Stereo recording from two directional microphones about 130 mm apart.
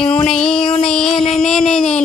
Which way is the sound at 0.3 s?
5° left (ahead or behind).